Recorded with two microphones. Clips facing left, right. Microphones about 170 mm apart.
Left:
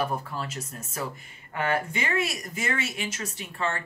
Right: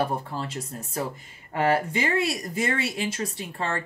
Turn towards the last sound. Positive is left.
turn(degrees=-35)  # may be behind; listen again after turning